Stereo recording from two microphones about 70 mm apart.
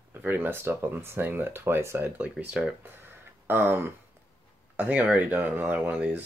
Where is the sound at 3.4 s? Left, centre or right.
Right.